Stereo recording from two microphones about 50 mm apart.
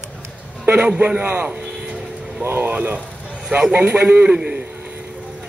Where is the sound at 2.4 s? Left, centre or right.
Right.